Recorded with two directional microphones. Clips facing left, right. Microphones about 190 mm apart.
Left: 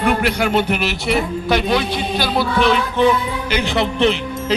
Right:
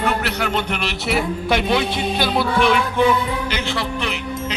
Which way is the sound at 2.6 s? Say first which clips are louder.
Left 1 dB; 10° right (ahead or behind).